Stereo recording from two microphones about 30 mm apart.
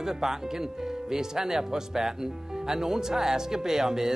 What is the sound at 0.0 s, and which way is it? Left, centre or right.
Speech, centre.